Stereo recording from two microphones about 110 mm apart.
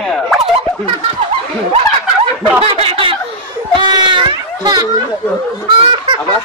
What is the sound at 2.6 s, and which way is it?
Speech, 55° right (ahead or behind).